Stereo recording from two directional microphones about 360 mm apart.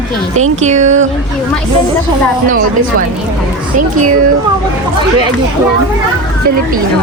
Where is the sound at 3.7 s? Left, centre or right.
Right.